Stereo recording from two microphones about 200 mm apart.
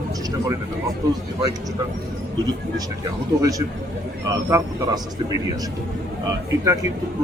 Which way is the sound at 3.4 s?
15° right (ahead or behind).